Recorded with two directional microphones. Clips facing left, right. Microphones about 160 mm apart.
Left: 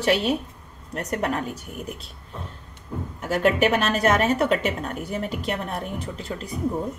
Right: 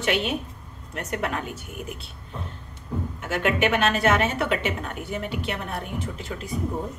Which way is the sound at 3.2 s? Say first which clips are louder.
Left 4 dB; 40° left (ahead or behind).